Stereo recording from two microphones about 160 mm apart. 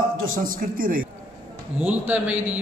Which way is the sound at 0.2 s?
60° right (ahead or behind).